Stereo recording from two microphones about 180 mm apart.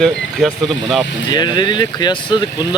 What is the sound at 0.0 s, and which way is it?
Speech, centre (ahead or behind).